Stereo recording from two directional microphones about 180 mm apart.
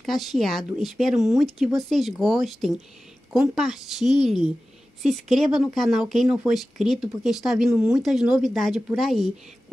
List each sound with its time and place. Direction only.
0.0 s speech: centre (ahead or behind)